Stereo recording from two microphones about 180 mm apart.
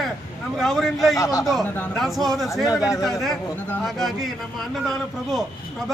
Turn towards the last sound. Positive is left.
turn(degrees=0)  # may be behind; listen again after turning